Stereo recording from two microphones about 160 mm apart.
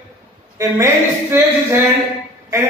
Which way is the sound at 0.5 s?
15° right (ahead or behind).